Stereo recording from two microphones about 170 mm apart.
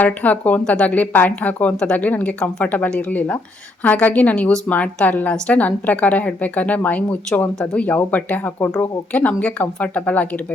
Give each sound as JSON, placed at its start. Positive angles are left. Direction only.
{"t": 0.0, "sound": "a woman's voice", "side_deg": 10}